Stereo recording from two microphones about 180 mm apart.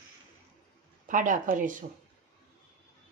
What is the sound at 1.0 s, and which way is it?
Speech, 45° right (ahead or behind).